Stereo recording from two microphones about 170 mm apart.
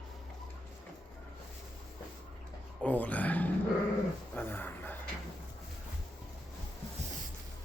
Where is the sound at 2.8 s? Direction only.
10° left (ahead or behind).